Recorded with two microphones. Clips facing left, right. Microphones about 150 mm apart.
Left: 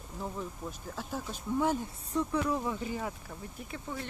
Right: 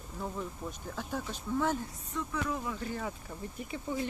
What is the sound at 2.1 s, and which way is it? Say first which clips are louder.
Speech: left 5 dB; 35° left (ahead or behind).